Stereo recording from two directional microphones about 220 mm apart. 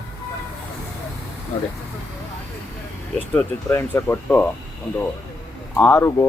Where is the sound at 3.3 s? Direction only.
10° left (ahead or behind).